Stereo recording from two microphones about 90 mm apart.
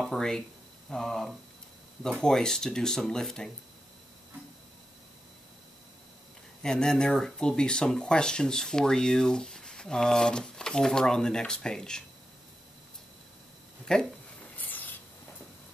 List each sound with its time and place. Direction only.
0.0 s speech: 5° left (ahead or behind)
6.6 s speech: 5° left (ahead or behind)
13.9 s speech: 5° left (ahead or behind)
14.6 s a sound: 20° left (ahead or behind)